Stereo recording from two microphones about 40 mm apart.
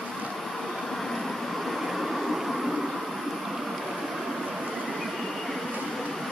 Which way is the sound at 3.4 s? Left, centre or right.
Centre.